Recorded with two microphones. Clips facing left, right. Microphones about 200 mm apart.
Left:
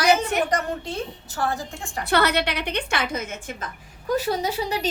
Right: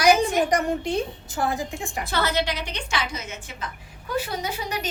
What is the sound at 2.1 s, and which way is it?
A woman's voice, 65° left (ahead or behind).